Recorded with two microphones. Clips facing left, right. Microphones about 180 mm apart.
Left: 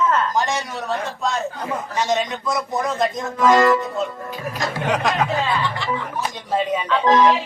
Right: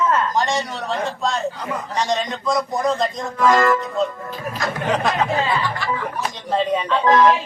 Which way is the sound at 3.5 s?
20° left (ahead or behind).